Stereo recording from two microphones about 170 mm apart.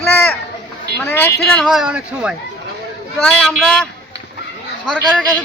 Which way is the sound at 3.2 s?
5° left (ahead or behind).